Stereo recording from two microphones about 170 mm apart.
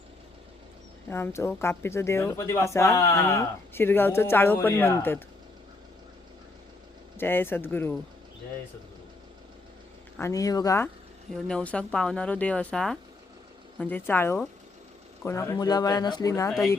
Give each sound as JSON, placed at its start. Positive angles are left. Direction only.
{"t": 1.1, "sound": "speech", "side_deg": 15}
{"t": 7.2, "sound": "speech", "side_deg": 15}
{"t": 10.2, "sound": "speech", "side_deg": 20}
{"t": 11.3, "sound": "speech", "side_deg": 5}
{"t": 16.5, "sound": "speech", "side_deg": 0}